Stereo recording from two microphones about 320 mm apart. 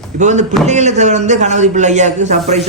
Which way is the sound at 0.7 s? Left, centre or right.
Right.